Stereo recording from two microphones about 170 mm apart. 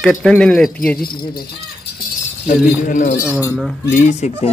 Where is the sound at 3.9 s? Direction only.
45° left (ahead or behind).